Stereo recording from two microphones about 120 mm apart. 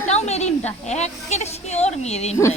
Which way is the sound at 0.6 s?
65° left (ahead or behind).